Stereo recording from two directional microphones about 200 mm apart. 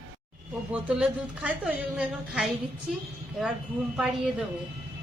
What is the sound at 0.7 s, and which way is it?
A woman's voice, 5° right (ahead or behind).